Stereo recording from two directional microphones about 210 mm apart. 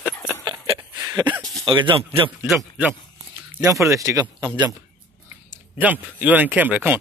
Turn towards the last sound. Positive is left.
turn(degrees=-10)  # may be behind; listen again after turning